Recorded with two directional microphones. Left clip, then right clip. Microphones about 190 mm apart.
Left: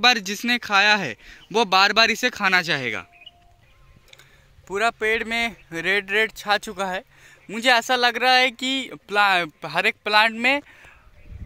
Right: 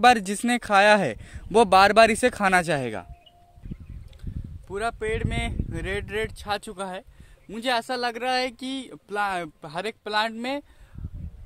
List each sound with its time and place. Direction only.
0.0 s speech: 45° right (ahead or behind)
4.6 s speech: 20° left (ahead or behind)